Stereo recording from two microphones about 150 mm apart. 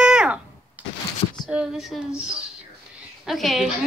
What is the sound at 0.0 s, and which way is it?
Thunk, 5° right (ahead or behind).